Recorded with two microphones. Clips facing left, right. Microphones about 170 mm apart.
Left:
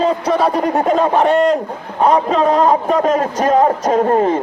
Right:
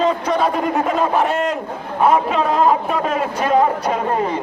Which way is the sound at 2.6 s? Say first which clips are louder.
Left 3 dB; 40° left (ahead or behind).